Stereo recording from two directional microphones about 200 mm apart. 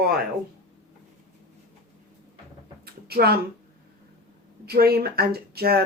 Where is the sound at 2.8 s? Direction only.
50° right (ahead or behind).